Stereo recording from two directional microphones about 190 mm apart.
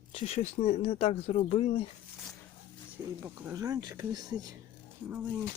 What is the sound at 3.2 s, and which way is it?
Speech, 15° right (ahead or behind).